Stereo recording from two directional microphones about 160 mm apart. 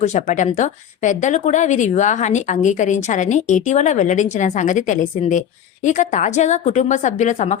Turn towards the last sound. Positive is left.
turn(degrees=50)  # may be behind; listen again after turning